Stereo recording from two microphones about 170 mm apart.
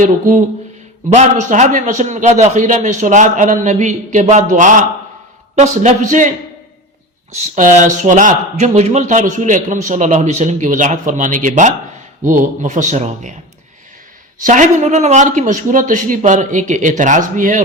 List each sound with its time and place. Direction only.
0.0 s speech: 50° right (ahead or behind)
7.3 s speech: 45° right (ahead or behind)
14.3 s speech: 50° right (ahead or behind)